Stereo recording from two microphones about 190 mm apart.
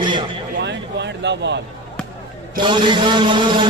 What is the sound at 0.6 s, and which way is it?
Speech, 65° right (ahead or behind).